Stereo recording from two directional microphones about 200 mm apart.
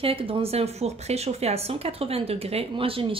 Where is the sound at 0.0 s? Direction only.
30° right (ahead or behind).